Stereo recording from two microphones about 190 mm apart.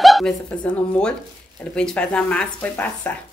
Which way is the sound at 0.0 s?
Centre (ahead or behind).